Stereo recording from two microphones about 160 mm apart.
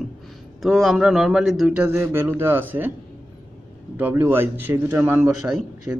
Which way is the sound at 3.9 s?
10° right (ahead or behind).